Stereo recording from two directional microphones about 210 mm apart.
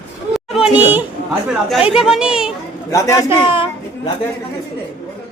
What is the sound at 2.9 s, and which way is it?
Speech, 15° left (ahead or behind).